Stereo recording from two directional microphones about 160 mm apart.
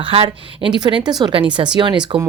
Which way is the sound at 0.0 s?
35° right (ahead or behind).